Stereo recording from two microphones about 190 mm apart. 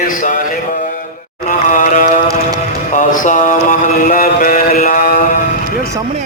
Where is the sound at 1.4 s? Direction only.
40° left (ahead or behind).